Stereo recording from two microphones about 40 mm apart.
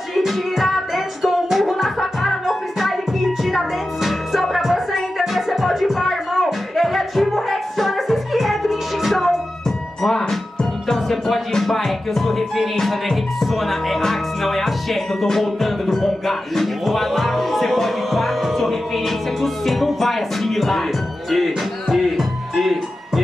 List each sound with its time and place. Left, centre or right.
0.1 s music: centre